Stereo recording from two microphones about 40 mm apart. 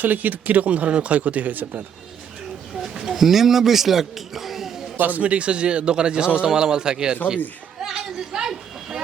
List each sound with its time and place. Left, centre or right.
0.0 s speech: right
2.9 s a man's voice: centre
4.9 s a man's voice: right
5.2 s a man's voice: right
7.9 s a sound: centre